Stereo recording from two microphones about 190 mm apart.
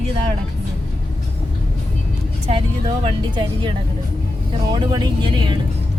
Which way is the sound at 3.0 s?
25° right (ahead or behind).